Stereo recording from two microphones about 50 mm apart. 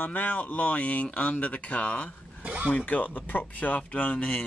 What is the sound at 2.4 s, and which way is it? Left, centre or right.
Speech, right.